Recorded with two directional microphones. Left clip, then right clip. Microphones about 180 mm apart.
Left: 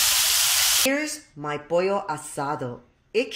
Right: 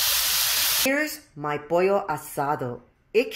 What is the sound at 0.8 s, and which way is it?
Speech, 5° right (ahead or behind).